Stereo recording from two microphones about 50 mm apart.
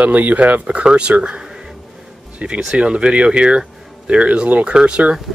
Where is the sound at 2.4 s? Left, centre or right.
Right.